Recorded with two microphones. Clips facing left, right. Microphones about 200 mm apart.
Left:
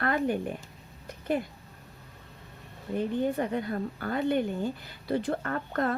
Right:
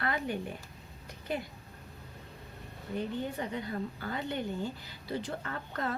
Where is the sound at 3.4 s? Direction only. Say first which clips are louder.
Left 6 dB; 55° left (ahead or behind).